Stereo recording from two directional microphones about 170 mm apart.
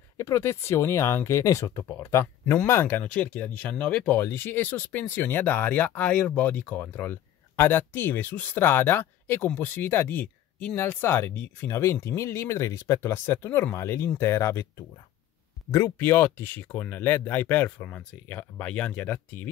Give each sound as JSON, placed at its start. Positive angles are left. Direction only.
{"t": 0.2, "sound": "speech", "side_deg": 15}